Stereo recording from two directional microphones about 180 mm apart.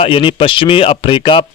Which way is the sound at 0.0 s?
30° left (ahead or behind).